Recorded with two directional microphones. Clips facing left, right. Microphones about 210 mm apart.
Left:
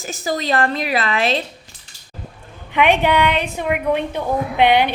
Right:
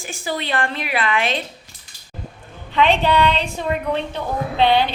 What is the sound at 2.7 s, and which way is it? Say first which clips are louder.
A woman's voice: left 1 dB; 15° left (ahead or behind).